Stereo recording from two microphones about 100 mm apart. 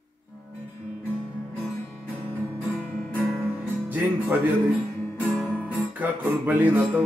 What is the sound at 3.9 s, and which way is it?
Speech, 20° right (ahead or behind).